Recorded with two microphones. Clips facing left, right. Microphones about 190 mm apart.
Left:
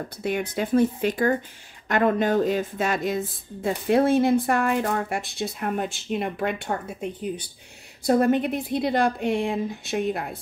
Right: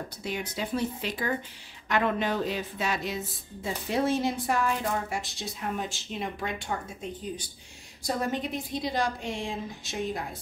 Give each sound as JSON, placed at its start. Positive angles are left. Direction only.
{"t": 0.2, "sound": "speech", "side_deg": 55}